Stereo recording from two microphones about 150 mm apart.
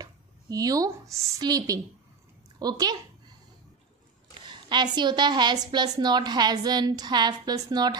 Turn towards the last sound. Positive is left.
turn(degrees=-25)  # may be behind; listen again after turning